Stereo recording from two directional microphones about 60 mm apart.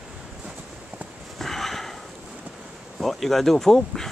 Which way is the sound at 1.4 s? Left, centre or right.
Centre.